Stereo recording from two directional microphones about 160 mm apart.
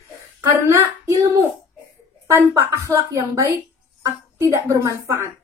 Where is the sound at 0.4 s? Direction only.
20° right (ahead or behind).